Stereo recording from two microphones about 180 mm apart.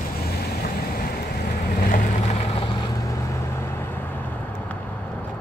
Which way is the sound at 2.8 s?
20° left (ahead or behind).